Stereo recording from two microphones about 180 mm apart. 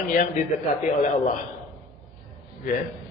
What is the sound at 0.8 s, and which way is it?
Speech, 45° left (ahead or behind).